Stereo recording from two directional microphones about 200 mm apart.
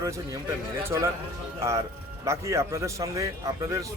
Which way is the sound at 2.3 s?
15° right (ahead or behind).